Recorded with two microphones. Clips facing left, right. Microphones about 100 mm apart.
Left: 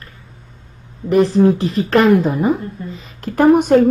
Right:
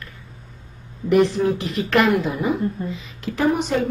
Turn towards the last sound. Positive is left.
turn(degrees=50)  # may be behind; listen again after turning